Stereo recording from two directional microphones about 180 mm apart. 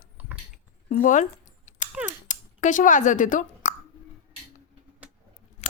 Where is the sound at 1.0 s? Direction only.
45° left (ahead or behind).